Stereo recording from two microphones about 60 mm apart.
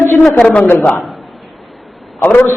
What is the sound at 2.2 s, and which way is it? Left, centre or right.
Speech, left.